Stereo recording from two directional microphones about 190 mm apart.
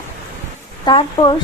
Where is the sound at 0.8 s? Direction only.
25° left (ahead or behind).